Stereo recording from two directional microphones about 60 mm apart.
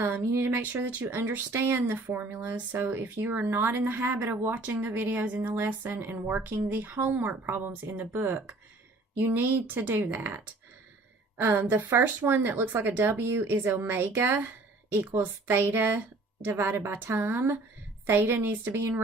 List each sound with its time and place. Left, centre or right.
0.1 s speech: right